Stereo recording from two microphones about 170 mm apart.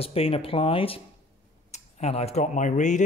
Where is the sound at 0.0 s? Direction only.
35° left (ahead or behind).